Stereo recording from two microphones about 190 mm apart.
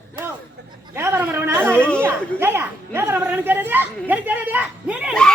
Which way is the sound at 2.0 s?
10° right (ahead or behind).